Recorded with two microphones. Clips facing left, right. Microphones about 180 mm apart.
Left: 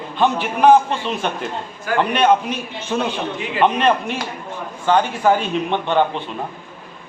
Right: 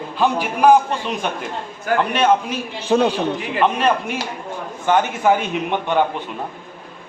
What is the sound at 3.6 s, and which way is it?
Speech, 5° right (ahead or behind).